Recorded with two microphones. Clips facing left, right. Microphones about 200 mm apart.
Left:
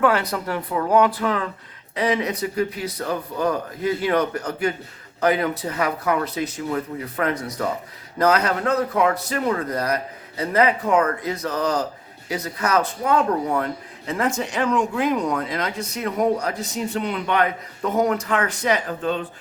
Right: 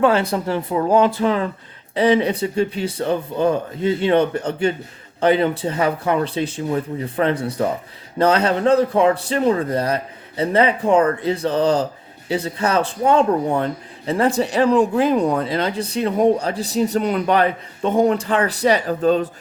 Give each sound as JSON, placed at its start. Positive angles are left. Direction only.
{"t": 0.0, "sound": "a man's voice", "side_deg": -25}